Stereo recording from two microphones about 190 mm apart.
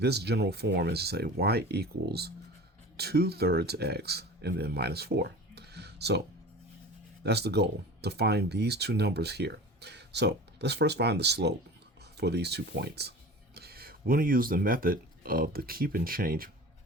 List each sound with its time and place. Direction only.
0.0 s speech: 60° right (ahead or behind)
7.3 s speech: 60° right (ahead or behind)